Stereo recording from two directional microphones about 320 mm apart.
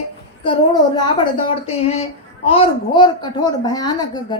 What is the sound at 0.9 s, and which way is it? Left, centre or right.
A woman's voice, centre.